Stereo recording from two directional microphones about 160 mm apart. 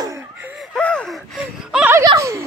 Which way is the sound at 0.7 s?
5° left (ahead or behind).